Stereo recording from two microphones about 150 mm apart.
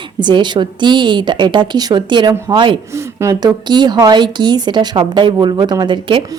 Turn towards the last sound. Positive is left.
turn(degrees=-30)  # may be behind; listen again after turning